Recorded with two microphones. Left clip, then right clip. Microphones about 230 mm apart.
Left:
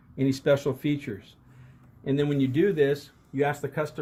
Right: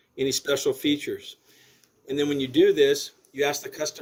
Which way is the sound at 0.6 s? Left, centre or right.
Right.